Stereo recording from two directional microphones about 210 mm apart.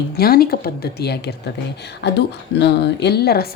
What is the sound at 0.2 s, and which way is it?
A woman's voice, 45° left (ahead or behind).